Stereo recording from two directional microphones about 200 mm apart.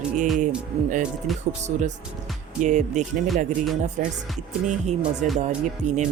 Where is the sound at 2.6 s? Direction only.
35° right (ahead or behind).